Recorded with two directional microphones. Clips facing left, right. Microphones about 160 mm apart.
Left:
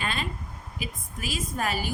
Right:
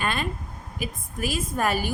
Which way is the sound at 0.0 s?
50° right (ahead or behind).